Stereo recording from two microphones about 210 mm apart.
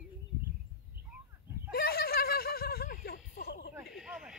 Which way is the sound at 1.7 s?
45° left (ahead or behind).